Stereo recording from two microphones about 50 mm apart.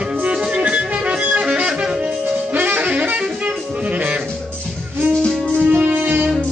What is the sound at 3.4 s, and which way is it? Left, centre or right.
Music, right.